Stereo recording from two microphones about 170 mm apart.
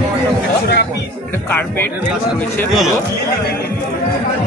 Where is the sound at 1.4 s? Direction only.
10° left (ahead or behind).